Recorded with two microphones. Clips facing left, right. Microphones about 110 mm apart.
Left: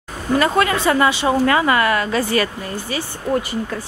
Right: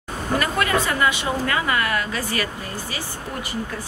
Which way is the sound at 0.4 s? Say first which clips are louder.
Left 5 dB; 25° left (ahead or behind).